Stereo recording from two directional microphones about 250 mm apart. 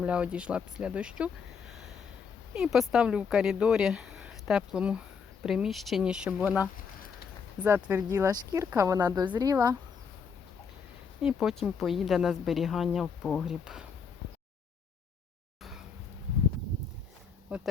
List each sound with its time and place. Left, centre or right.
0.0 s a woman's voice: centre
2.5 s a woman's voice: centre
11.2 s a woman's voice: centre
17.5 s a woman's voice: centre